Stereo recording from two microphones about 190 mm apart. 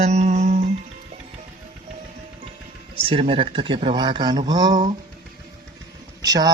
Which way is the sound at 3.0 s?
30° right (ahead or behind).